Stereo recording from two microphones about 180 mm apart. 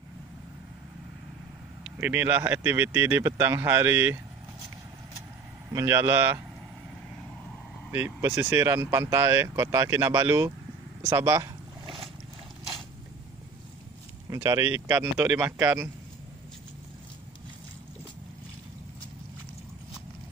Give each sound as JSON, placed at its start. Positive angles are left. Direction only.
{"t": 1.9, "sound": "speech", "side_deg": -10}
{"t": 5.7, "sound": "speech", "side_deg": -15}
{"t": 7.9, "sound": "speech", "side_deg": -10}
{"t": 14.3, "sound": "speech", "side_deg": -15}